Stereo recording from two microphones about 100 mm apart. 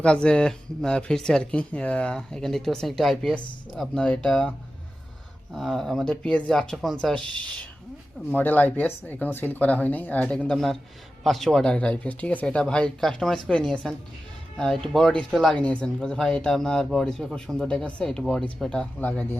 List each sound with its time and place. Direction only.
0.0 s speech: 10° left (ahead or behind)
5.5 s speech: 5° left (ahead or behind)
8.3 s speech: 15° left (ahead or behind); by 15.5 s centre (ahead or behind)
15.5 s speech: 10° left (ahead or behind)